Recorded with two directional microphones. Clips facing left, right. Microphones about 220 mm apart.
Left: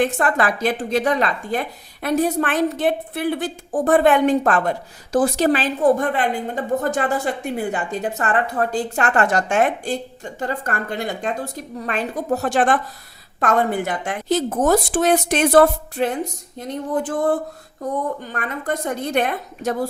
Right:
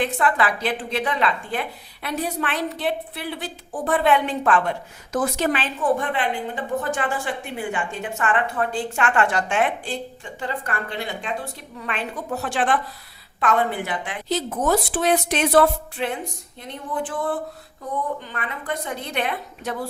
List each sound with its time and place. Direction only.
0.0 s a woman's voice: 45° left (ahead or behind)